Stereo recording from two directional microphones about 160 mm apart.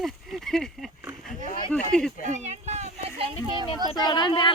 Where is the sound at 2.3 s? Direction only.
45° right (ahead or behind).